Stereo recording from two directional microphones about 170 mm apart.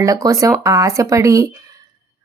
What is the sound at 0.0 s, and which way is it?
Speech, 20° right (ahead or behind).